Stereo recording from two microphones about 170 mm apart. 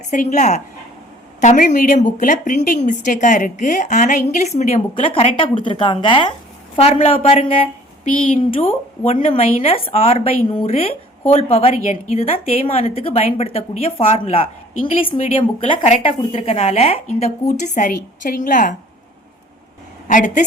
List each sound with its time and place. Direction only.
0.1 s a woman's voice: 45° left (ahead or behind)
8.0 s a woman's voice: 50° left (ahead or behind)
8.4 s a woman's voice: 30° left (ahead or behind); by 18.8 s 50° left (ahead or behind)
20.1 s a woman's voice: 50° left (ahead or behind)